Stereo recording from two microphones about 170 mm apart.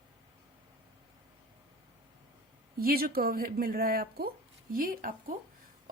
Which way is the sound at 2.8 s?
60° right (ahead or behind).